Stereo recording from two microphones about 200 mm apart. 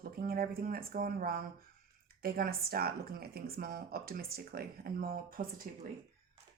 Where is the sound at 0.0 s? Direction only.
50° right (ahead or behind).